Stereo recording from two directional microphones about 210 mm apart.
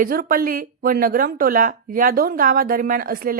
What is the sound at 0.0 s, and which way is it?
A woman's voice, 45° right (ahead or behind).